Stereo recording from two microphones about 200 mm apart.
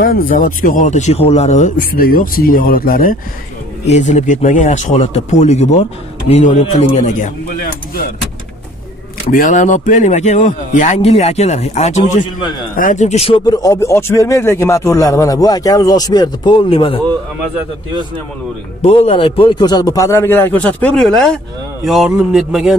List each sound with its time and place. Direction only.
0.0 s speech: 45° left (ahead or behind)
3.8 s a man's voice: 35° left (ahead or behind)
9.3 s a man's voice: 40° left (ahead or behind)
13.5 s speech: 15° left (ahead or behind)
18.8 s speech: 30° left (ahead or behind); by 22.8 s centre (ahead or behind)